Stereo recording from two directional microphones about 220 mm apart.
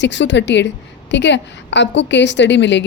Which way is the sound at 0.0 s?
55° left (ahead or behind).